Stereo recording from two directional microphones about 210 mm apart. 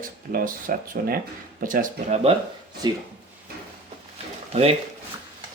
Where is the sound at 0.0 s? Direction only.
40° right (ahead or behind).